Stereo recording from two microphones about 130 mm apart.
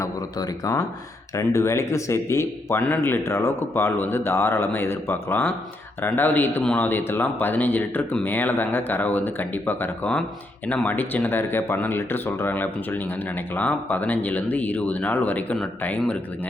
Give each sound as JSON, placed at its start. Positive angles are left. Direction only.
{"t": 0.0, "sound": "speech", "side_deg": 25}